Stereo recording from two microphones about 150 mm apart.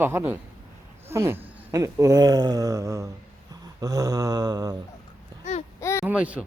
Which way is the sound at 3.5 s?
25° right (ahead or behind).